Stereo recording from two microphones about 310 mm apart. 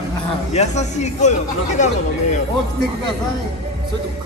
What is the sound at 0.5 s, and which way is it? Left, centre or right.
Speech, left.